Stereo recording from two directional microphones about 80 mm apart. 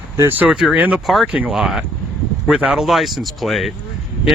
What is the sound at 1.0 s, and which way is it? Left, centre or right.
Speech, centre.